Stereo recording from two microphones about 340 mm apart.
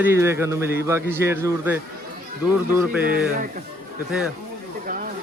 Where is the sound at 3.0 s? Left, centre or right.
Right.